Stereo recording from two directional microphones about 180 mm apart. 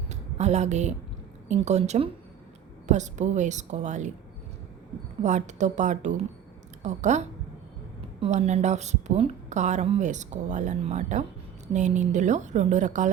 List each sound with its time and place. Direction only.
0.1 s a woman's voice: 40° right (ahead or behind)
5.2 s a woman's voice: 40° right (ahead or behind)